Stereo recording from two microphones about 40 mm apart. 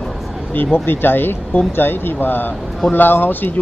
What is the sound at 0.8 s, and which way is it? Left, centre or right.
A man's voice, left.